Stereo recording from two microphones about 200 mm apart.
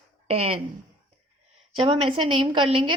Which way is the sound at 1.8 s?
30° right (ahead or behind).